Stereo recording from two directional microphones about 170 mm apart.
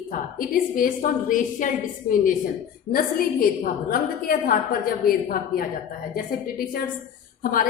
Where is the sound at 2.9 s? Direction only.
60° left (ahead or behind).